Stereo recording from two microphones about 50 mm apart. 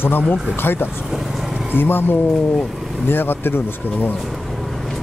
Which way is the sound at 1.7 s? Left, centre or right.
Left.